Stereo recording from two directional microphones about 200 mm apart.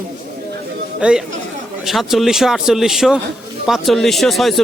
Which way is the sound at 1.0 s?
5° right (ahead or behind).